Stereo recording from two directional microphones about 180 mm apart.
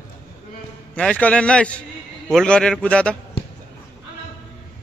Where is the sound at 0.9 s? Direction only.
5° left (ahead or behind).